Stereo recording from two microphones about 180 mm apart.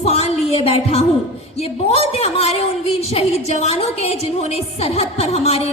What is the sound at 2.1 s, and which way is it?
A woman's voice, 35° left (ahead or behind).